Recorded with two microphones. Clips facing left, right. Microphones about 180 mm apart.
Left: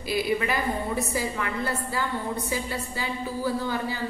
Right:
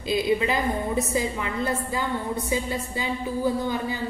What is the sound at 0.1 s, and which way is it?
A woman's voice, 20° right (ahead or behind).